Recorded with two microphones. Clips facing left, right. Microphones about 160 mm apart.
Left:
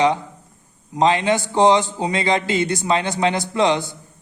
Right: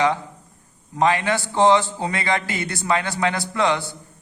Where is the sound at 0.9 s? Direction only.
20° left (ahead or behind).